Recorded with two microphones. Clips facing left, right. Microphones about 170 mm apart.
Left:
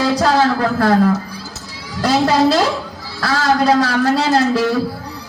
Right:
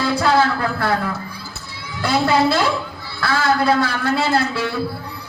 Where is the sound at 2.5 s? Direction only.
40° left (ahead or behind).